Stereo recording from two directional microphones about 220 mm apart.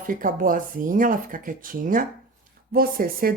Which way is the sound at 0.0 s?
40° right (ahead or behind).